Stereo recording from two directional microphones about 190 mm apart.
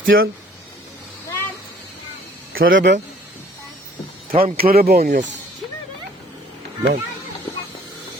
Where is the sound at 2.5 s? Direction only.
85° right.